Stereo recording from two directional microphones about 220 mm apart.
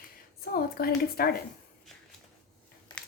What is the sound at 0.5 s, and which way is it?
Speech, 45° left (ahead or behind).